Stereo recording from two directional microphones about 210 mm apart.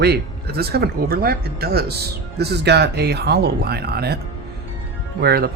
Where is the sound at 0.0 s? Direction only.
50° right (ahead or behind).